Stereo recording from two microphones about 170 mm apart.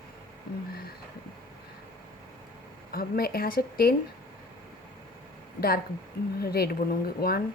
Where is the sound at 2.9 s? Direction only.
60° left (ahead or behind).